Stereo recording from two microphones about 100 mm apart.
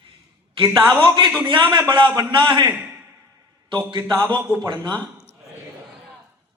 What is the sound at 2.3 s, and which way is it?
Speech, 50° right (ahead or behind).